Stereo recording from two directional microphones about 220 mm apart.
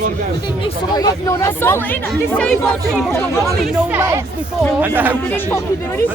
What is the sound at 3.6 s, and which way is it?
Speech, 10° right (ahead or behind).